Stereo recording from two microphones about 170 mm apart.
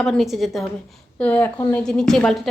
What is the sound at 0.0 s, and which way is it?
A woman's voice, centre (ahead or behind).